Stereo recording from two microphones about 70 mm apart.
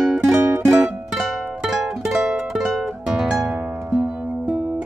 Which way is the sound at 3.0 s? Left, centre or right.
Centre.